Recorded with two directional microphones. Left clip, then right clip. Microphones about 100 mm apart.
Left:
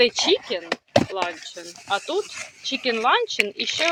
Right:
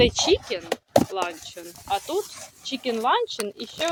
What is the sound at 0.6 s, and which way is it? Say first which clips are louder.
Chop: right 1 dB; 10° left (ahead or behind).